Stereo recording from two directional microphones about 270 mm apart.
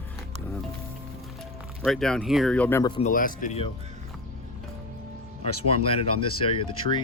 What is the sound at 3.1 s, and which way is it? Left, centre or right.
Speech, left.